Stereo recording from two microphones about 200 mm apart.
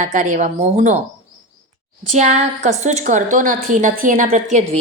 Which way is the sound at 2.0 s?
35° right (ahead or behind).